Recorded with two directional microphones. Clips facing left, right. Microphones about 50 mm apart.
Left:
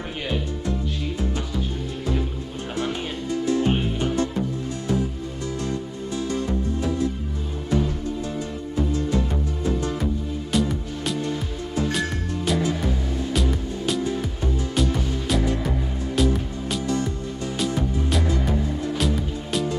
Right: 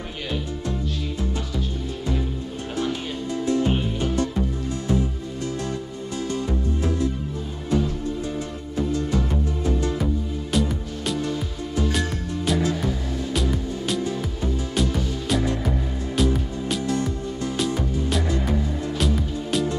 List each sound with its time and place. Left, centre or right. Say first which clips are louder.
10.5 s music: left 1 dB; centre